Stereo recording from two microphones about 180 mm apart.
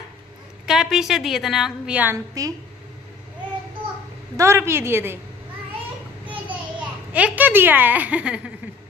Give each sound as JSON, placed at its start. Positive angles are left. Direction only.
{"t": 0.7, "sound": "a woman's voice", "side_deg": 0}
{"t": 2.4, "sound": "a woman's voice", "side_deg": -20}
{"t": 4.4, "sound": "a child's voice", "side_deg": -15}
{"t": 6.2, "sound": "a sound", "side_deg": -10}
{"t": 7.1, "sound": "a child's voice", "side_deg": -10}